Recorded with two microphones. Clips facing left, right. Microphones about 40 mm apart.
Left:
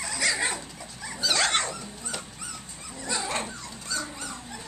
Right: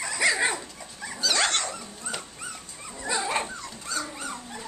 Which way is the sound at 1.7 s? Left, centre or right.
Centre.